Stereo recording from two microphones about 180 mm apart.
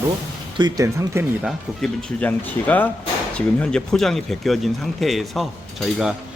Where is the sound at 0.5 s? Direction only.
20° right (ahead or behind).